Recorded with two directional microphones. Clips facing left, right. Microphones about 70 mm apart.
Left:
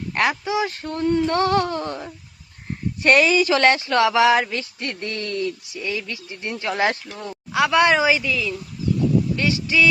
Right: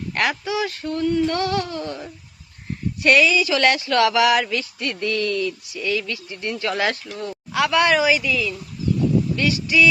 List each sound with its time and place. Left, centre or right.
0.1 s speech: left